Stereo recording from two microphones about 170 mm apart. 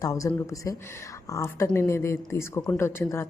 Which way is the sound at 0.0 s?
20° left (ahead or behind).